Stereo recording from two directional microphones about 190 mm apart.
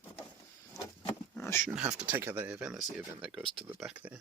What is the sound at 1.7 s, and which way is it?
Speech, 5° right (ahead or behind).